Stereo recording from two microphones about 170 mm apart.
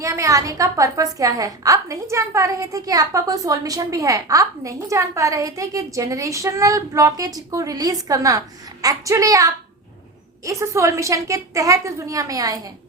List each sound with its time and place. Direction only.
0.0 s a woman's voice: 20° right (ahead or behind)